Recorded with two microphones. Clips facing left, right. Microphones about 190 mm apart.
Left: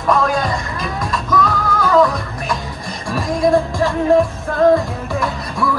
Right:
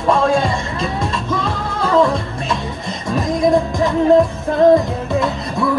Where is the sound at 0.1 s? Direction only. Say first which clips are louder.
Right 2 dB; 25° right (ahead or behind).